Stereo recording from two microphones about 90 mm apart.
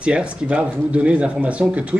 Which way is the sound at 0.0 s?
10° right (ahead or behind).